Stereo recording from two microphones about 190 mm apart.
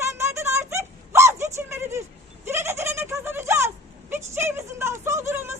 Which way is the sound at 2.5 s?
15° right (ahead or behind).